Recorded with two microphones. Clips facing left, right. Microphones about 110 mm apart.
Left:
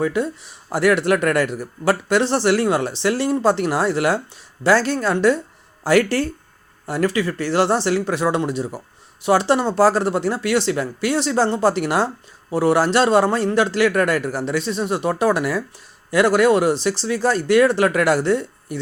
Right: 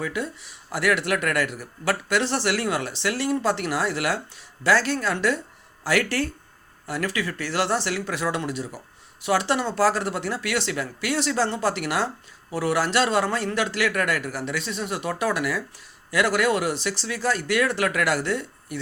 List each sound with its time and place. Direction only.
0.0 s a man's voice: 35° left (ahead or behind)